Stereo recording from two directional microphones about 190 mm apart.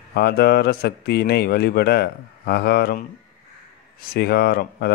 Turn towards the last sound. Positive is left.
turn(degrees=55)  # may be behind; listen again after turning